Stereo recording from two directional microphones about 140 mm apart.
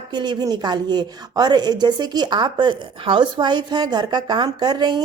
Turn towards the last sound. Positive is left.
turn(degrees=-30)  # may be behind; listen again after turning